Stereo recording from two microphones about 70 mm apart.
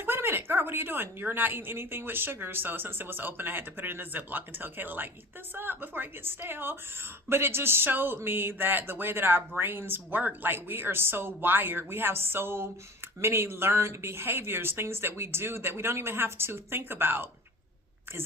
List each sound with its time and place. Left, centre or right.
0.0 s speech: right